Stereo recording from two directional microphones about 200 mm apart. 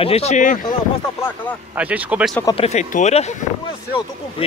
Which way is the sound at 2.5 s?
35° left (ahead or behind).